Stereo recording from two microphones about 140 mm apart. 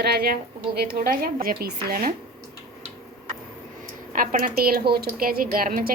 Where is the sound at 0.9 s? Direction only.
90° right.